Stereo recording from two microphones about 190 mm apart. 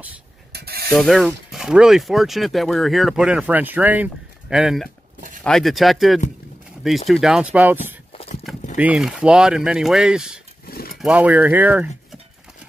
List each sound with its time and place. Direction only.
0.5 s mechanisms: 55° right (ahead or behind)
0.9 s speech: centre (ahead or behind)
10.7 s a sound: 50° left (ahead or behind)
11.0 s speech: 5° right (ahead or behind)